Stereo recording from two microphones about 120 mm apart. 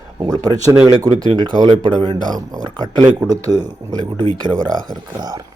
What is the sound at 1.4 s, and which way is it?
Speech, 40° right (ahead or behind).